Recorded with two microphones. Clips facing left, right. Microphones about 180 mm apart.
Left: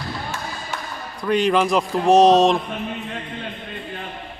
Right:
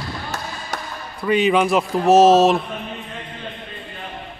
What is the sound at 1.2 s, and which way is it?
Speech, 5° right (ahead or behind).